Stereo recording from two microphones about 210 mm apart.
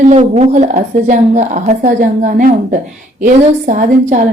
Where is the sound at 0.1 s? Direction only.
30° right (ahead or behind).